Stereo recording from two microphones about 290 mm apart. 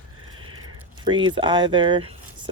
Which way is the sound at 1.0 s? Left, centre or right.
Centre.